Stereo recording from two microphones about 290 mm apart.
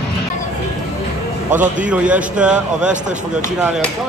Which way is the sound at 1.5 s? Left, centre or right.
Right.